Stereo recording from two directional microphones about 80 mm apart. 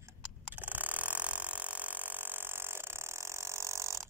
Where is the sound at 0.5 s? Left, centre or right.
Right.